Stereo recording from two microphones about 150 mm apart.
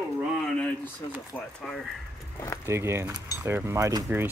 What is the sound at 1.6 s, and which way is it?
Speech, 5° left (ahead or behind).